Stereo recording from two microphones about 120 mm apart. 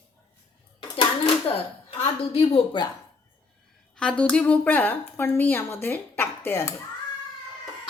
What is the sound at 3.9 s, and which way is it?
A woman's voice, 10° left (ahead or behind).